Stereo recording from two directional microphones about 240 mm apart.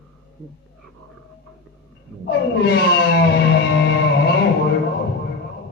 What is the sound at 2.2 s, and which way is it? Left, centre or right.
Music, left.